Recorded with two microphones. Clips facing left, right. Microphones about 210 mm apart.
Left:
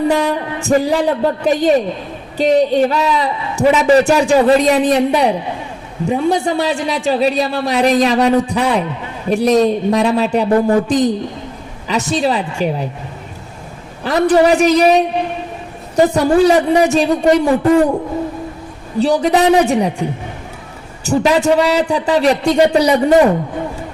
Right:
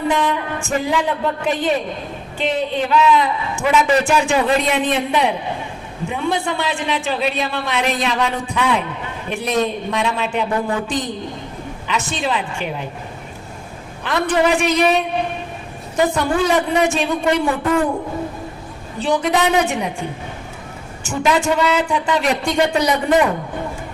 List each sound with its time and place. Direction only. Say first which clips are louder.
0.1 s a man's voice: left 4 dB; 35° left (ahead or behind)
14.0 s a man's voice: left 6 dB; 40° left (ahead or behind)
19.0 s a man's voice: left 5 dB; 35° left (ahead or behind)
21.0 s a man's voice: left 5 dB; 35° left (ahead or behind)